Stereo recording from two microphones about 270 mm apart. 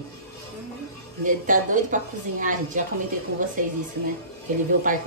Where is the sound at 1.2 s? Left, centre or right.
Right.